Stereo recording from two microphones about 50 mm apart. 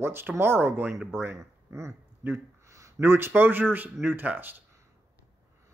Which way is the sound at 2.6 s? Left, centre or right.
Right.